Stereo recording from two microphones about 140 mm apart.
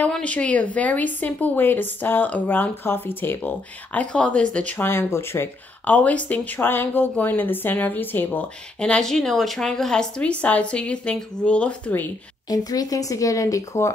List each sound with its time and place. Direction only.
0.0 s speech: 10° left (ahead or behind)
12.4 s speech: 25° left (ahead or behind)